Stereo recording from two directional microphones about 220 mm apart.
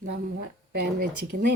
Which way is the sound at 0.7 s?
45° right (ahead or behind).